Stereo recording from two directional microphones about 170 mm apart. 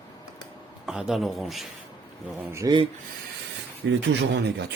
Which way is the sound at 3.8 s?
90° right.